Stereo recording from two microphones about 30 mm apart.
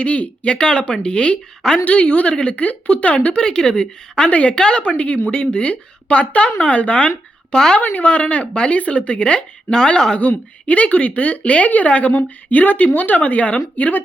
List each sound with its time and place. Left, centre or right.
0.0 s a woman's voice: left
3.3 s speech: left
4.3 s a woman's voice: left
4.5 s speech: left
4.8 s a woman's voice: left
7.5 s speech: left
7.8 s a woman's voice: left
9.6 s speech: left
10.2 s a woman's voice: left
12.1 s a woman's voice: left